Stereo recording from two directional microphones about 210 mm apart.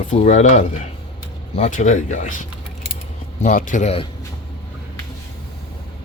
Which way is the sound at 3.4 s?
40° left (ahead or behind).